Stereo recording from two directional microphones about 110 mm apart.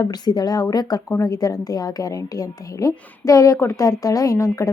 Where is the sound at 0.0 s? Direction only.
40° left (ahead or behind).